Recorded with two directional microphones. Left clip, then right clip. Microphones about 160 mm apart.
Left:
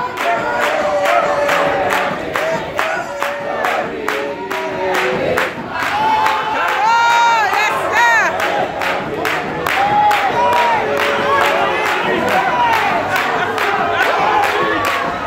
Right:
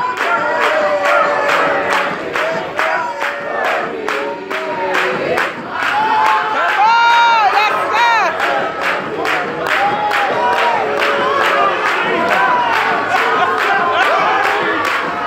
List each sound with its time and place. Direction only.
6.8 s crowd: 15° left (ahead or behind)